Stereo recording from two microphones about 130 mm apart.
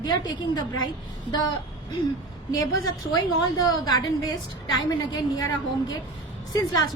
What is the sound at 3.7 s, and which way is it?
A woman's voice, 30° left (ahead or behind).